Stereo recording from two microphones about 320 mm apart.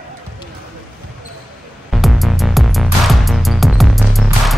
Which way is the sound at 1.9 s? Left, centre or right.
Centre.